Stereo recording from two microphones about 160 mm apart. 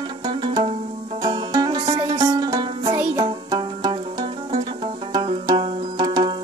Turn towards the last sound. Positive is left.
turn(degrees=-25)  # may be behind; listen again after turning